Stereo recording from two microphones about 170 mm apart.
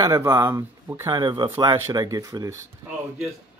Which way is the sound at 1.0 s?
25° right (ahead or behind).